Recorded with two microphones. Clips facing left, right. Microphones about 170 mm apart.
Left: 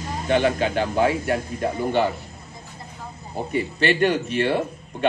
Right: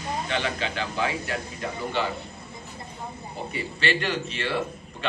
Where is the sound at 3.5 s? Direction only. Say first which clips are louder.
Left 6 dB; 55° left (ahead or behind).